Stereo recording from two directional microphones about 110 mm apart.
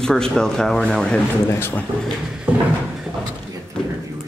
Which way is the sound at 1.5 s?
20° left (ahead or behind).